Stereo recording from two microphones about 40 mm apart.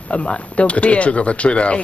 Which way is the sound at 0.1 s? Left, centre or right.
Left.